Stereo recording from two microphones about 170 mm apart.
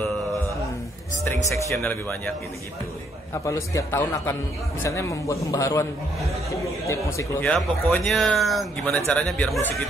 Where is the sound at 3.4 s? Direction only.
15° left (ahead or behind).